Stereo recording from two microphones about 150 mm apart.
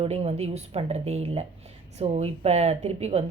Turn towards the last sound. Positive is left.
turn(degrees=-45)  # may be behind; listen again after turning